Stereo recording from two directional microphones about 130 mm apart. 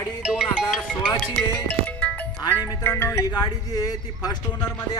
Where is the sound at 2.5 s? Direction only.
15° right (ahead or behind).